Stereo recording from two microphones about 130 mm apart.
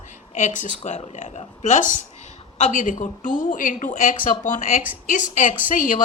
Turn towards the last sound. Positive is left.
turn(degrees=85)